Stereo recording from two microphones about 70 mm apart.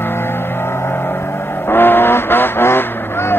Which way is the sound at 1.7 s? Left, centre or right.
Left.